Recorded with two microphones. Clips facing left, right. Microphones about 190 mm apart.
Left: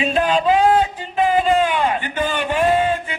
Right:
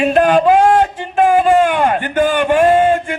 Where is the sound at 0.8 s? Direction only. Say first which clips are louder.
Right 5 dB; 50° right (ahead or behind).